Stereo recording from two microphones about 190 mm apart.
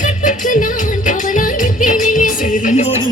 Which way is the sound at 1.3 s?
45° left (ahead or behind).